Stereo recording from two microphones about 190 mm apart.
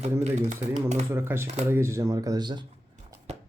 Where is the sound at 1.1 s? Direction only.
10° right (ahead or behind).